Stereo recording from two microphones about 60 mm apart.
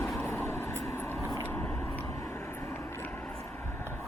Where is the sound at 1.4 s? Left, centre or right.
Left.